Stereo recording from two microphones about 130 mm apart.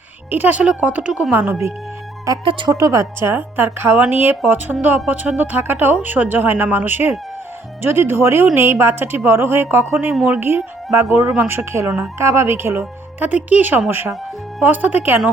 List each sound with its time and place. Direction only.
0.3 s a woman's voice: 10° right (ahead or behind)
2.4 s speech: 40° right (ahead or behind)
2.6 s a woman's voice: 25° right (ahead or behind)